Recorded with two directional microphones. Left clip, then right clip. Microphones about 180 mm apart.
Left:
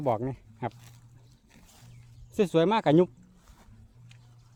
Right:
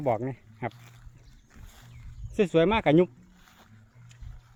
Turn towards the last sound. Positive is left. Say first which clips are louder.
# right 1 dB
turn(degrees=5)  # may be behind; listen again after turning